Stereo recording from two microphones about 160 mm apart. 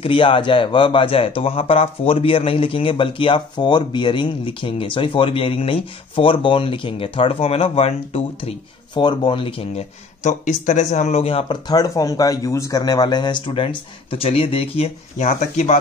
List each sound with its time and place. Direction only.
0.0 s speech: 30° left (ahead or behind)
9.0 s speech: 30° left (ahead or behind); by 15.8 s 50° left (ahead or behind)